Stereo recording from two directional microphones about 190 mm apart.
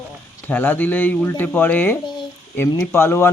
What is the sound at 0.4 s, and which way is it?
Speech, 10° left (ahead or behind).